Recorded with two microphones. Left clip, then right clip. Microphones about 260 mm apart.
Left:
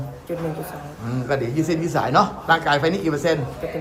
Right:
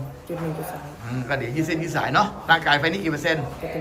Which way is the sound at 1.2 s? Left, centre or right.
Centre.